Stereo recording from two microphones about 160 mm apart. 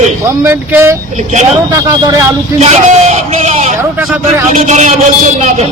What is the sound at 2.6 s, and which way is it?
A man's voice, 45° right (ahead or behind).